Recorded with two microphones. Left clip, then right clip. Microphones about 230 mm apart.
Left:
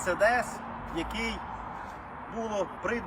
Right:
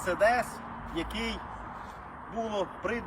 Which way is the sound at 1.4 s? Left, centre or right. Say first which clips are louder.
Left 3 dB; left.